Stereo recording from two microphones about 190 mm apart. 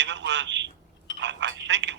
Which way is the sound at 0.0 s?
65° right (ahead or behind).